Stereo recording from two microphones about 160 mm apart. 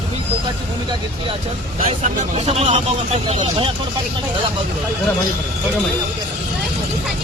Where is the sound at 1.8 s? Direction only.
40° right (ahead or behind).